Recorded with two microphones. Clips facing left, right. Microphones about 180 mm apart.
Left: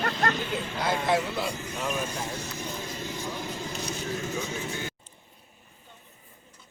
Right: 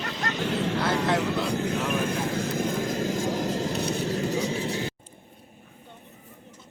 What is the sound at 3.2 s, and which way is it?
Vehicle, 40° right (ahead or behind).